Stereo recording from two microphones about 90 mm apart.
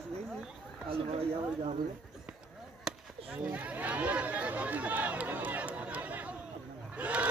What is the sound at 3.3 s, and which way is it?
Chatter, 15° right (ahead or behind).